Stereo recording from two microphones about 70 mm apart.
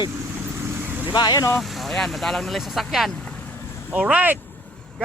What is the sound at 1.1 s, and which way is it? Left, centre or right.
Speech, left.